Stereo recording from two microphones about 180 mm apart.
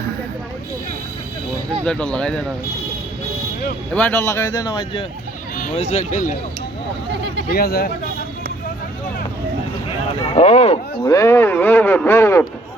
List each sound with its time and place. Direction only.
1.8 s speech: 5° left (ahead or behind)
3.9 s speech: 10° left (ahead or behind)
5.5 s speech: 45° left (ahead or behind)
7.5 s speech: 60° left (ahead or behind)
10.3 s speech: 35° left (ahead or behind)
11.0 s speech: 15° left (ahead or behind)